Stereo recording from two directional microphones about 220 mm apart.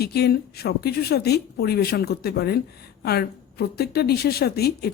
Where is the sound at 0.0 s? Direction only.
45° left (ahead or behind).